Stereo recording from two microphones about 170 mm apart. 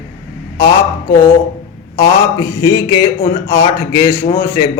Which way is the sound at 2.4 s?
20° left (ahead or behind).